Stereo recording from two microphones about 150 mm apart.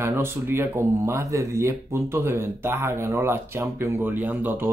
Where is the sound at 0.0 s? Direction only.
15° right (ahead or behind).